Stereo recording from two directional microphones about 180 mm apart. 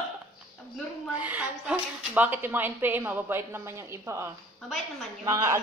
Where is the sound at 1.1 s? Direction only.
10° right (ahead or behind).